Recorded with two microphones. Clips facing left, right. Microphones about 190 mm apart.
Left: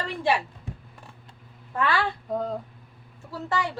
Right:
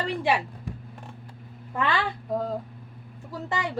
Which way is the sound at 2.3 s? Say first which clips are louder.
Right 1 dB; centre (ahead or behind).